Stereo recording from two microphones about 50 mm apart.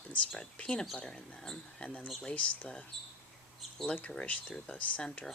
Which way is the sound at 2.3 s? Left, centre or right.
Left.